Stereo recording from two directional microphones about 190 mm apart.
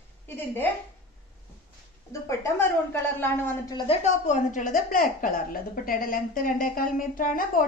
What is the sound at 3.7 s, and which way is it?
A woman's voice, 30° left (ahead or behind).